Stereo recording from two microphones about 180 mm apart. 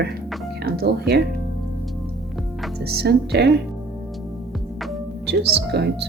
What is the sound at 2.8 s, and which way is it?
Speech, 60° right (ahead or behind).